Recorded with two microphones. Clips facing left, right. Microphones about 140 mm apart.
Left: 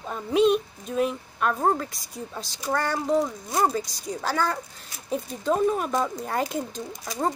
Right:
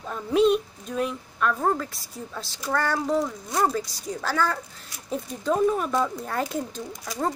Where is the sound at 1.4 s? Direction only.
20° left (ahead or behind); by 5.6 s 5° left (ahead or behind).